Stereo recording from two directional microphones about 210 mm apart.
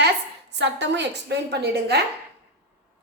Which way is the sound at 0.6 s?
55° right (ahead or behind).